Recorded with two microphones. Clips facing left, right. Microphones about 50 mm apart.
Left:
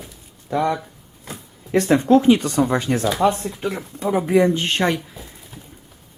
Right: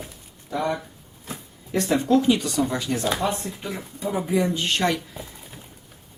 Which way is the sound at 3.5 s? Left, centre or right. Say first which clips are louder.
Left 6 dB; left.